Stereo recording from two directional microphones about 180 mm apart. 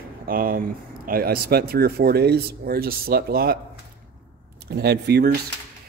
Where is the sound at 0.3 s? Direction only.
50° right (ahead or behind).